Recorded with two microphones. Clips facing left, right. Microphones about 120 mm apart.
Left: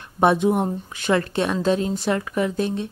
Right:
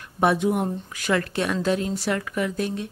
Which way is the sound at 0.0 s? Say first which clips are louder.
Left 3 dB; 25° left (ahead or behind).